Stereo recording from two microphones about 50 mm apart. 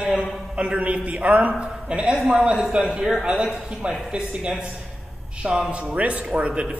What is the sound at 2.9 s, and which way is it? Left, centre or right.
Speech, centre.